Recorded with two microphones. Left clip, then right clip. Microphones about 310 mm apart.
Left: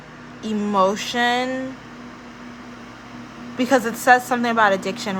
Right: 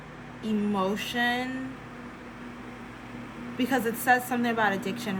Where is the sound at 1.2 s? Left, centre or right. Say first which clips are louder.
Left 8 dB; centre.